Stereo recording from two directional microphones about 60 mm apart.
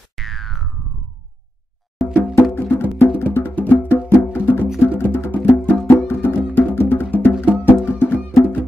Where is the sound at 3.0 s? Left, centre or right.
Left.